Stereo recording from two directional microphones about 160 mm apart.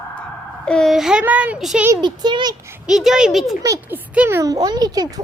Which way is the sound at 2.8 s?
Centre (ahead or behind).